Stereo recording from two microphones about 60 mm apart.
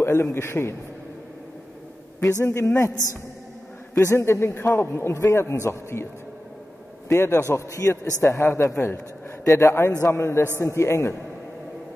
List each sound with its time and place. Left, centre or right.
0.0 s a man's voice: left
2.4 s a man's voice: left
3.9 s a man's voice: left
5.1 s a man's voice: left
7.1 s a man's voice: left